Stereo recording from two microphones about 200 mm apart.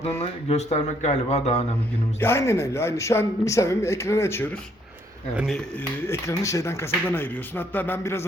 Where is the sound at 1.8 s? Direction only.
10° left (ahead or behind).